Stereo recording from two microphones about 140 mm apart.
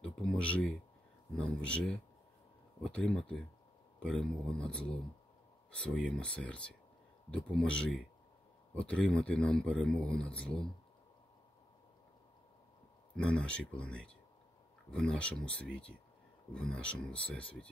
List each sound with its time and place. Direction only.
0.0 s a sound: 5° left (ahead or behind)
1.3 s speech: 5° left (ahead or behind)
13.1 s speech: 5° left (ahead or behind)